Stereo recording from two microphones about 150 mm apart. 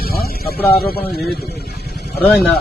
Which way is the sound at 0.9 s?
90° left.